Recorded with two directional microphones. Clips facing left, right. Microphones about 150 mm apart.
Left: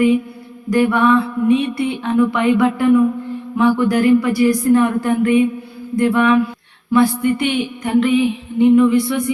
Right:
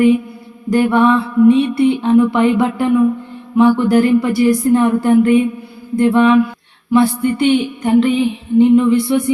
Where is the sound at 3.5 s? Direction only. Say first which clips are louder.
Right 4 dB; 25° right (ahead or behind).